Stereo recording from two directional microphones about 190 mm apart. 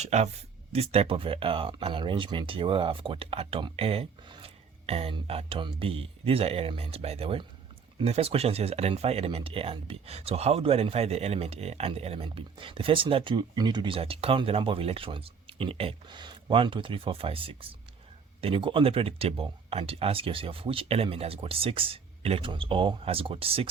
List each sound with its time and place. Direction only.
0.0 s speech: 35° right (ahead or behind)